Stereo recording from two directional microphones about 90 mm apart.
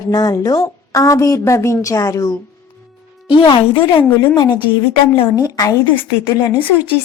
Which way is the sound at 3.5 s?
65° left (ahead or behind).